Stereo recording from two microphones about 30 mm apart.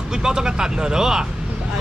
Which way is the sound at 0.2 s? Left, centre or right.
Right.